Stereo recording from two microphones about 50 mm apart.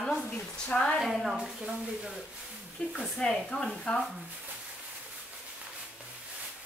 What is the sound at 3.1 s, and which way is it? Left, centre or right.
Speech, centre.